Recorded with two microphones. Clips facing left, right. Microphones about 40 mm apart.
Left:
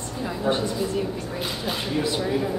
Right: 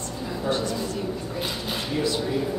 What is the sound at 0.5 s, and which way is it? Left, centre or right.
Speech, left.